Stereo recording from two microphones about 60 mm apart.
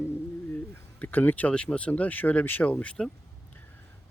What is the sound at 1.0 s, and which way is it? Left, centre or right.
Speech, left.